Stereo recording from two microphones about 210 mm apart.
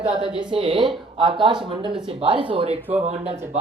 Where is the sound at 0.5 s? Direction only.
25° right (ahead or behind).